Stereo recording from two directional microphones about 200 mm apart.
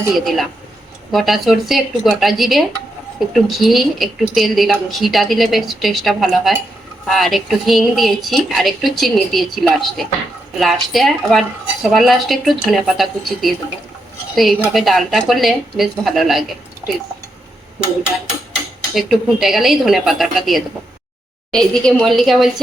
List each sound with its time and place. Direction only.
0.1 s a woman's voice: centre (ahead or behind)
18.9 s a woman's voice: centre (ahead or behind)